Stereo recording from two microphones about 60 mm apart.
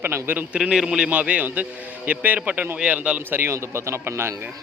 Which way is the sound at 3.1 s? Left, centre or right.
Right.